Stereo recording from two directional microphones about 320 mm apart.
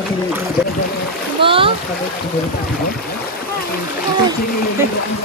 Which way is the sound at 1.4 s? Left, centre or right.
Centre.